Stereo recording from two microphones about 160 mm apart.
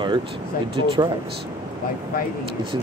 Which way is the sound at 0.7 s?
30° right (ahead or behind).